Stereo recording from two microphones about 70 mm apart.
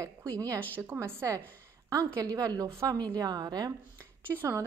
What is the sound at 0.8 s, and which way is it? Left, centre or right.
Speech, right.